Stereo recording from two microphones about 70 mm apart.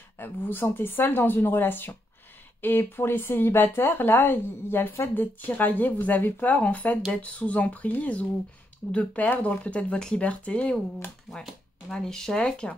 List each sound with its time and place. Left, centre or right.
0.2 s speech: left
11.2 s speech: centre